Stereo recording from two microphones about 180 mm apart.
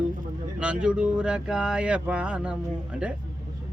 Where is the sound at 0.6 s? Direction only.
5° right (ahead or behind).